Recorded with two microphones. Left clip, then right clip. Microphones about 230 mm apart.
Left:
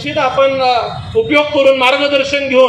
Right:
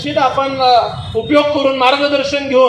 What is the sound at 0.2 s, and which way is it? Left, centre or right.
Speech, right.